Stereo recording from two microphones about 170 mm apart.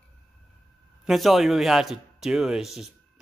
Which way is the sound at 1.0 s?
Centre (ahead or behind).